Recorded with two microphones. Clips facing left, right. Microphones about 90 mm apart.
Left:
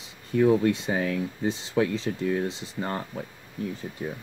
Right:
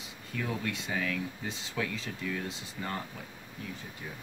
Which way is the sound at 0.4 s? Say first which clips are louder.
Left 14 dB; 30° left (ahead or behind).